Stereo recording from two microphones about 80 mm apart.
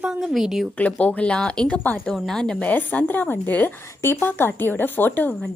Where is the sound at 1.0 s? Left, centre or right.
Centre.